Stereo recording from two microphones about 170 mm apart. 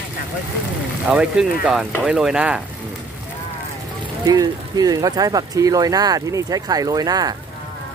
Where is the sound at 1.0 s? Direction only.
5° right (ahead or behind).